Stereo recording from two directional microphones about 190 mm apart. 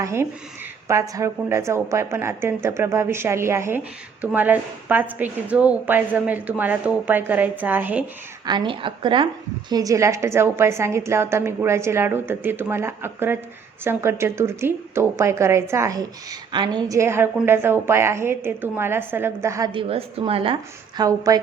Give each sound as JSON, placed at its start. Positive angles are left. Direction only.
{"t": 0.0, "sound": "a woman's voice", "side_deg": -15}
{"t": 8.4, "sound": "a woman's voice", "side_deg": -25}